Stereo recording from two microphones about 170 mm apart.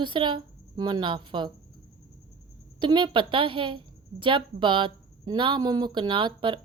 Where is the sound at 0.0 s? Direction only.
30° right (ahead or behind).